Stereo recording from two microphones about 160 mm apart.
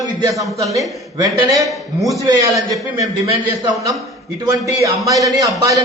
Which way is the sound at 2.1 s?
20° right (ahead or behind).